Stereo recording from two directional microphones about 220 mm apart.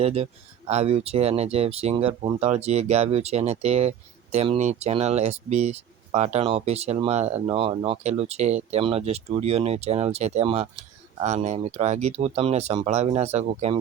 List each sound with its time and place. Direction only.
0.0 s speech: 25° right (ahead or behind)